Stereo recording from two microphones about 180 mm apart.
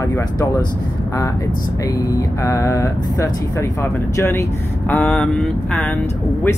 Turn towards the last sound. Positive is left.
turn(degrees=5)  # may be behind; listen again after turning